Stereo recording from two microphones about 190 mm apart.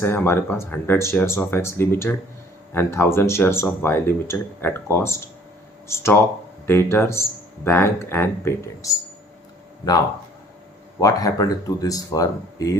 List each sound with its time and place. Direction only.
0.0 s speech: 10° left (ahead or behind)
11.0 s speech: 20° left (ahead or behind)